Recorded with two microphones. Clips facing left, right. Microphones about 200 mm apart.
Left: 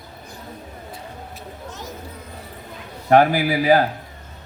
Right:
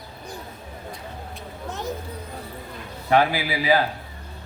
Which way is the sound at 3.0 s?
45° left (ahead or behind).